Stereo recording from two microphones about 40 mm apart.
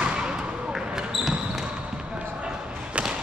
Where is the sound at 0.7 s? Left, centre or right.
Centre.